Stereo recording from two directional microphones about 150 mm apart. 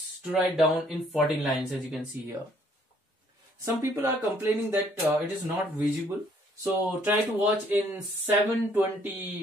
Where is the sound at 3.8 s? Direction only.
15° right (ahead or behind).